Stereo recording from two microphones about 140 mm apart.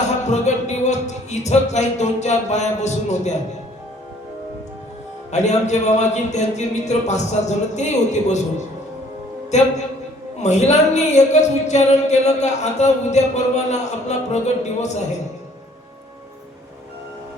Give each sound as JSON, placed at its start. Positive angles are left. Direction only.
{"t": 0.3, "sound": "music", "side_deg": 55}
{"t": 5.3, "sound": "speech", "side_deg": 55}